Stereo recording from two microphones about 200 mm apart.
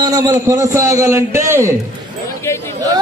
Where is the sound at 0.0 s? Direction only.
15° right (ahead or behind).